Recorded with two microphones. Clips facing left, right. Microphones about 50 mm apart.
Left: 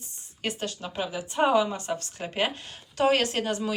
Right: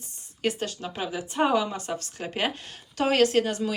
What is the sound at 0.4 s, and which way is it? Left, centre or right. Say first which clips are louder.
A woman's voice: right 3 dB; centre.